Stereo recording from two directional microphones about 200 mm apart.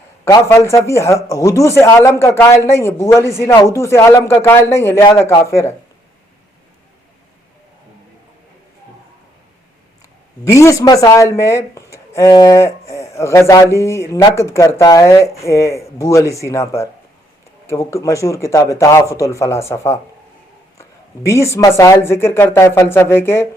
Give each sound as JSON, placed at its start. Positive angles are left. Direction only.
{"t": 0.3, "sound": "speech", "side_deg": 15}
{"t": 10.4, "sound": "speech", "side_deg": 15}
{"t": 21.2, "sound": "speech", "side_deg": 15}